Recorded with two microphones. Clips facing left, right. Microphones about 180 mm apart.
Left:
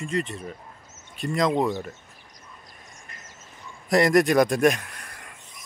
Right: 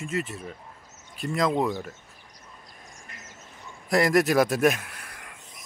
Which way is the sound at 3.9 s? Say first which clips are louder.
Left 2 dB; centre (ahead or behind).